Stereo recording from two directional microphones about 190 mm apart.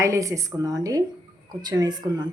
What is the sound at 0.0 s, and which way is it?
A woman's voice, 15° right (ahead or behind).